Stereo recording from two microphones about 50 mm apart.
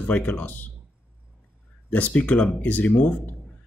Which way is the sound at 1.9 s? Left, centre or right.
Left.